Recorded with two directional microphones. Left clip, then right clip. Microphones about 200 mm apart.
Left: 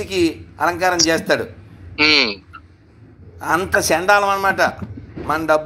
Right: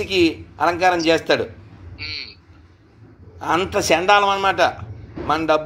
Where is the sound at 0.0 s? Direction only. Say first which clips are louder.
Right 1 dB; 5° left (ahead or behind).